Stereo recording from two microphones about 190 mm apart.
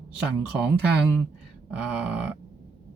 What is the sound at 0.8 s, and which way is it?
Speech, 5° right (ahead or behind).